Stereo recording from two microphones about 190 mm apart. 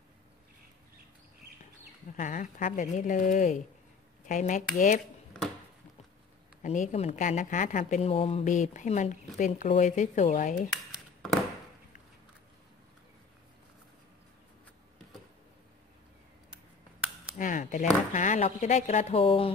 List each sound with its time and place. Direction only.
2.1 s a woman's voice: 40° left (ahead or behind)
6.6 s a woman's voice: 40° left (ahead or behind)
17.4 s a woman's voice: 40° left (ahead or behind)